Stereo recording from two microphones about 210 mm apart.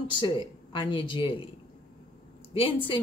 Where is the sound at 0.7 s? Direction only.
25° left (ahead or behind).